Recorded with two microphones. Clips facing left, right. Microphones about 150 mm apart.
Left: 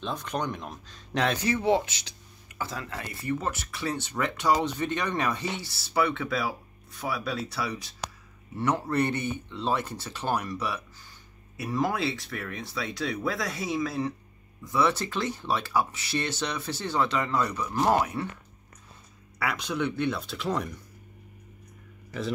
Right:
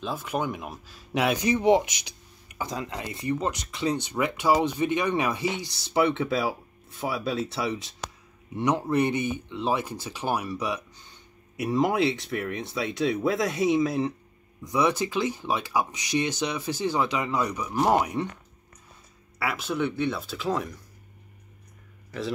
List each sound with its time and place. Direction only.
0.0 s speech: 5° right (ahead or behind)
19.3 s speech: 5° right (ahead or behind)